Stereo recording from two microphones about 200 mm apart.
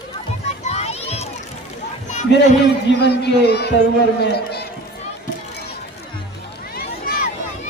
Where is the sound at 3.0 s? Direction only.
55° left (ahead or behind).